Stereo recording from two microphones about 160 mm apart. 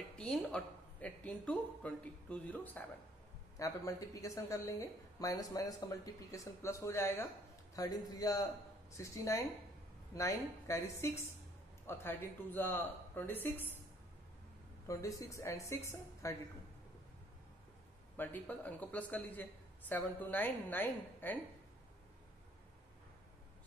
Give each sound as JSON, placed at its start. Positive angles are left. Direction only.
{"t": 0.2, "sound": "speech", "side_deg": 5}
{"t": 3.5, "sound": "a woman's voice", "side_deg": 20}
{"t": 14.9, "sound": "a woman's voice", "side_deg": 20}
{"t": 18.1, "sound": "speech", "side_deg": 10}